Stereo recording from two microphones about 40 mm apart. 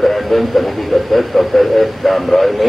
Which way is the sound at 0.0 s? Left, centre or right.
Centre.